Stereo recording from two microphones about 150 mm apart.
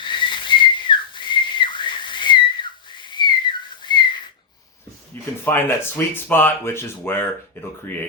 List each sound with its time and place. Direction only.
0.0 s whistling: 30° left (ahead or behind)
5.1 s speech: 15° left (ahead or behind)